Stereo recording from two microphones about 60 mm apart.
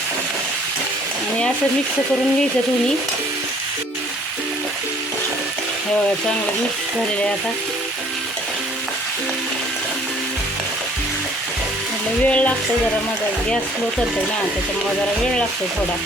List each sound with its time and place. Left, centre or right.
12.2 s frying: left